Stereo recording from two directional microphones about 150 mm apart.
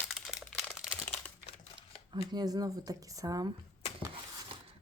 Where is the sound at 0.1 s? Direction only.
5° right (ahead or behind).